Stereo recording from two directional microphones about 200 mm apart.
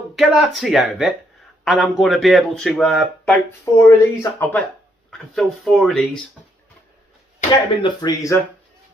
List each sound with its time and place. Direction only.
0.2 s speech: centre (ahead or behind)
3.8 s speech: 15° left (ahead or behind)
5.1 s speech: 5° left (ahead or behind)
7.8 s speech: 20° left (ahead or behind)